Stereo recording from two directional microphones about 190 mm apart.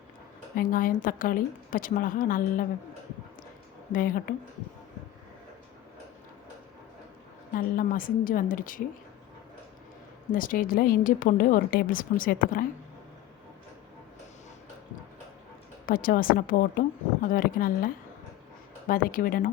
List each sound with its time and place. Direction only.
0.5 s speech: 45° left (ahead or behind)
3.9 s speech: 45° left (ahead or behind)
7.5 s speech: 50° left (ahead or behind)
10.3 s speech: 45° left (ahead or behind)
15.9 s speech: 50° left (ahead or behind)